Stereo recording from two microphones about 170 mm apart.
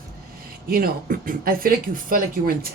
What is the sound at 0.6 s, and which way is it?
Speech, 60° right (ahead or behind).